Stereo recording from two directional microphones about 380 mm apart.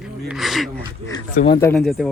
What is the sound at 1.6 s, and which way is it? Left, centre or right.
Speech, centre.